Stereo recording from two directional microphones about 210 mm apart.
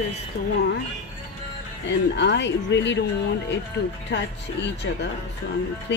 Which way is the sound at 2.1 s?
55° left (ahead or behind).